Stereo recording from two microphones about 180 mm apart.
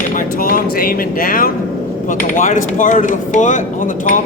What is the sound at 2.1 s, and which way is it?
Speech, 45° left (ahead or behind).